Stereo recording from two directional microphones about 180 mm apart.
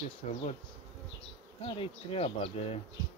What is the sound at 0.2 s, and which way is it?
Speech, 40° left (ahead or behind).